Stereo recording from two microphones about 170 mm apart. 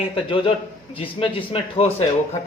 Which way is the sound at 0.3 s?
30° left (ahead or behind).